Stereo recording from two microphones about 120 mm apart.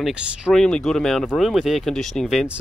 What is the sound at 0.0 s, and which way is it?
Speech, 10° right (ahead or behind).